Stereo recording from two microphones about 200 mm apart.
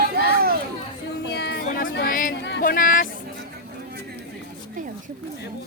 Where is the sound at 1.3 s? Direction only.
55° left (ahead or behind).